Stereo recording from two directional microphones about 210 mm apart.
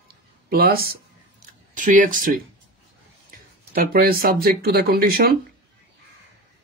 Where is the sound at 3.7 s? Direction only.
45° right (ahead or behind).